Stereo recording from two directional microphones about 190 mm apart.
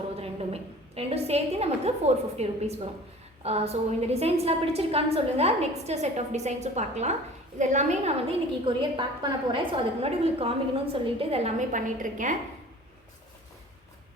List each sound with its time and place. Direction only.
0.2 s a woman's voice: 30° right (ahead or behind)
8.6 s a woman's voice: 25° right (ahead or behind); by 12.4 s 40° right (ahead or behind)